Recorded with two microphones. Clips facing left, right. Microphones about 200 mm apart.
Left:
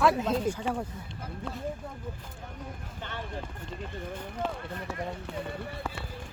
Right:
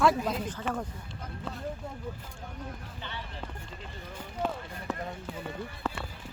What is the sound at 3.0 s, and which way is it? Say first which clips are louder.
Speech: left 7 dB; 50° left (ahead or behind).